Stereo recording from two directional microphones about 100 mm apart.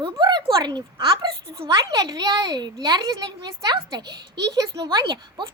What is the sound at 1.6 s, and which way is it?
A child's voice, 45° right (ahead or behind).